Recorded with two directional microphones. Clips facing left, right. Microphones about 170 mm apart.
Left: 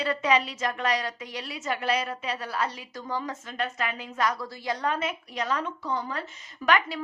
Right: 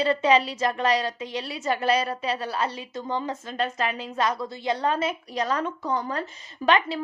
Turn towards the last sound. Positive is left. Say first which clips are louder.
# right 3 dB
turn(degrees=-30)  # may be behind; listen again after turning